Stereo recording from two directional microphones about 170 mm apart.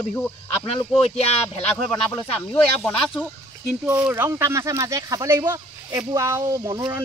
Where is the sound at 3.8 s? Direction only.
10° right (ahead or behind).